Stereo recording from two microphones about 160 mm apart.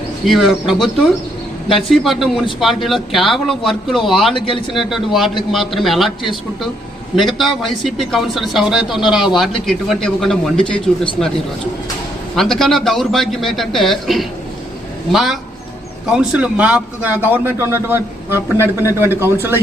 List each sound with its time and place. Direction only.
0.3 s speech: centre (ahead or behind)
4.4 s speech: 35° left (ahead or behind)
4.7 s speech: centre (ahead or behind)
7.3 s speech: centre (ahead or behind)
12.4 s a man's voice: centre (ahead or behind); by 19.5 s 15° right (ahead or behind)